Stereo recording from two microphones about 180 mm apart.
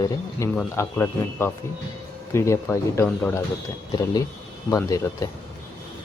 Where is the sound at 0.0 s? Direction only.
20° left (ahead or behind).